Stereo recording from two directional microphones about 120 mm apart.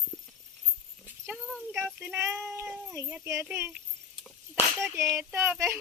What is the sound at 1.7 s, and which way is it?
Child singing, 5° right (ahead or behind).